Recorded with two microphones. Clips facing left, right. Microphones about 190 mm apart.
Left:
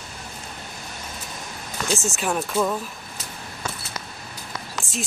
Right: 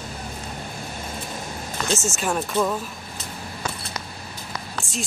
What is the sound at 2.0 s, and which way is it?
Speech, centre (ahead or behind).